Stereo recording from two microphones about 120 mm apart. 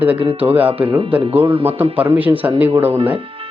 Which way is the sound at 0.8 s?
50° right (ahead or behind).